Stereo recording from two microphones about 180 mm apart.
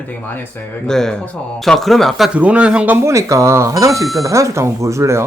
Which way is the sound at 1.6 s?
Centre (ahead or behind).